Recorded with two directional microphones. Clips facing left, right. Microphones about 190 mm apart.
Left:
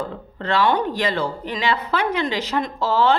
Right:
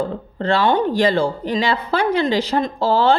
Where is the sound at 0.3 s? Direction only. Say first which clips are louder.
Right 3 dB; 30° right (ahead or behind).